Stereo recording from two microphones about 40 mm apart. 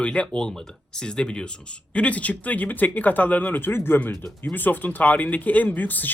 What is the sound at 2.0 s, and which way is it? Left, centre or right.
Speech, left.